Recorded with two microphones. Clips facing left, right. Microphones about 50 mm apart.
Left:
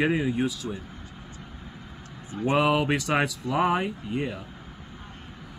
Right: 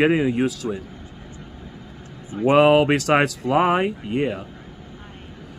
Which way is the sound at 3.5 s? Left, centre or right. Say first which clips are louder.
Right 5 dB; right.